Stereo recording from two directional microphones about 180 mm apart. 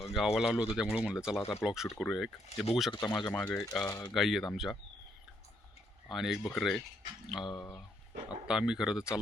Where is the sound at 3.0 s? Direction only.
20° left (ahead or behind).